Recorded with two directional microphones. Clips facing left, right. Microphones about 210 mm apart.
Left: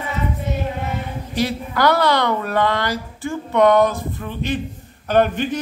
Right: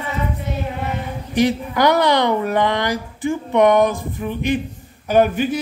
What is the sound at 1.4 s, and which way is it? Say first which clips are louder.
Speech: right 4 dB; 15° right (ahead or behind).